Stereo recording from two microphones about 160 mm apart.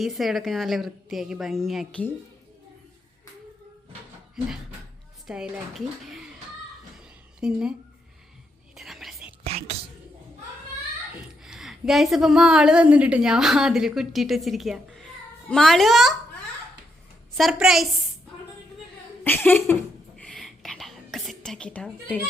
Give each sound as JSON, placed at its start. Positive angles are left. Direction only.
{"t": 0.0, "sound": "a woman's voice", "side_deg": 0}
{"t": 5.2, "sound": "a woman's voice", "side_deg": 0}
{"t": 7.3, "sound": "a woman's voice", "side_deg": -5}
{"t": 8.7, "sound": "whispering", "side_deg": 0}
{"t": 9.4, "sound": "whispering", "side_deg": -40}
{"t": 11.4, "sound": "a sound", "side_deg": -5}
{"t": 12.1, "sound": "a woman's voice", "side_deg": 0}
{"t": 17.3, "sound": "a woman's voice", "side_deg": 0}
{"t": 19.2, "sound": "speech", "side_deg": 10}
{"t": 20.1, "sound": "whispering", "side_deg": 5}